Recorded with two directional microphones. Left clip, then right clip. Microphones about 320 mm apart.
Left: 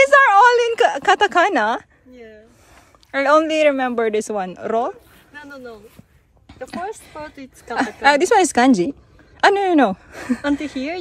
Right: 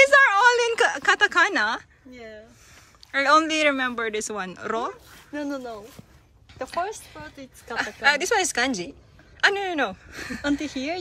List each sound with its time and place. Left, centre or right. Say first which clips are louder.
0.0 s a sound: left 5 dB; centre
3.1 s speech: left 4 dB; centre
5.3 s speech: right 4 dB; centre
6.7 s a woman's voice: even; centre
10.6 s speech: left 3 dB; left